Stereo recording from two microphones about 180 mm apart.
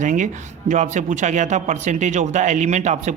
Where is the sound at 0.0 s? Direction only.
45° right (ahead or behind).